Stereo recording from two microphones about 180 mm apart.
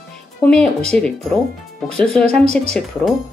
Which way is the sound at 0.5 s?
5° left (ahead or behind).